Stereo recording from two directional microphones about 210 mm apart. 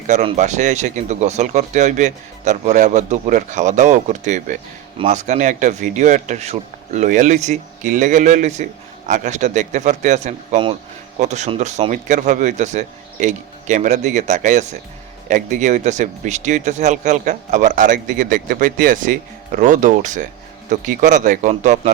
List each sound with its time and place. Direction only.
0.1 s speech: 35° right (ahead or behind)